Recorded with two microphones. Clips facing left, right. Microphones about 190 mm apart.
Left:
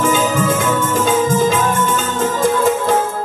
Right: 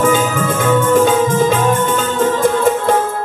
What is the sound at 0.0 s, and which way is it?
Music, 60° right (ahead or behind).